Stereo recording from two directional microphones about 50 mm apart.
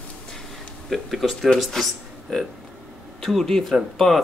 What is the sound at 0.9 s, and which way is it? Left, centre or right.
Speech, centre.